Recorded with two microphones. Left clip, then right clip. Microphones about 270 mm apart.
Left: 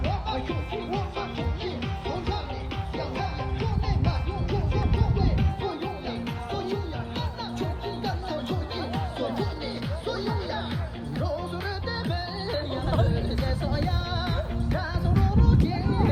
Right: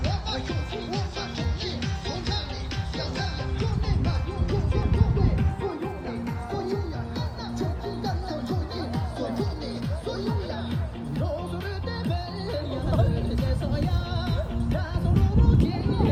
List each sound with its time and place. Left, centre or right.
0.0 s music: left
10.1 s music: centre
11.9 s music: centre